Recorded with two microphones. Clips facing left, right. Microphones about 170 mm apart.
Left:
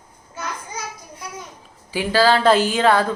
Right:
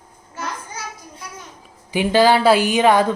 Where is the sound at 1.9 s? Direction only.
20° right (ahead or behind).